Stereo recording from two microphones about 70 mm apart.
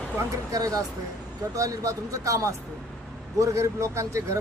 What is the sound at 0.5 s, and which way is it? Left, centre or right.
A man's voice, right.